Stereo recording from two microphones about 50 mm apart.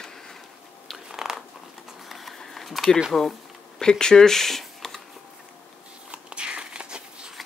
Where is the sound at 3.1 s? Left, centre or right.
Centre.